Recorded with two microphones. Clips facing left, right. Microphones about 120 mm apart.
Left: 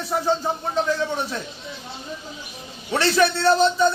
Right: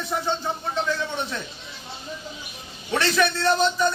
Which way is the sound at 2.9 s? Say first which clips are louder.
Left 3 dB; 30° left (ahead or behind).